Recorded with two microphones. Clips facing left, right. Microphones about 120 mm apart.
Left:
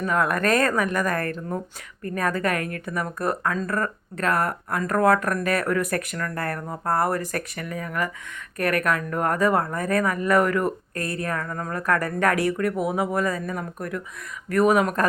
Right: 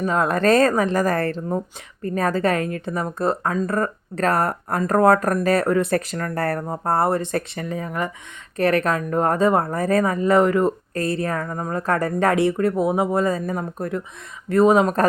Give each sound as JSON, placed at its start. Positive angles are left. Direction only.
{"t": 0.0, "sound": "speech", "side_deg": -25}
{"t": 4.2, "sound": "speech", "side_deg": -35}